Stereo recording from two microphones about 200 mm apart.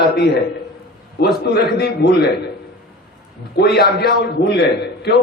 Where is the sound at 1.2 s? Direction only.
50° left (ahead or behind).